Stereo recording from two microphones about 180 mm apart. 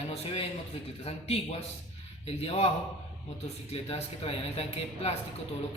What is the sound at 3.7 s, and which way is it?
A man's voice, 35° left (ahead or behind).